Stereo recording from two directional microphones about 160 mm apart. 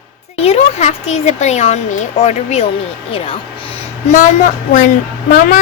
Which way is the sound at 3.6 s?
50° left (ahead or behind).